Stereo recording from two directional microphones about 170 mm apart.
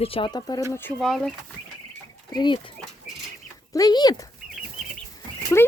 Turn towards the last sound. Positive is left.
turn(degrees=15)  # may be behind; listen again after turning